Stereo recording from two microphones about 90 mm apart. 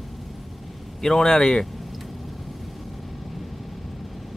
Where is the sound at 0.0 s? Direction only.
Centre (ahead or behind).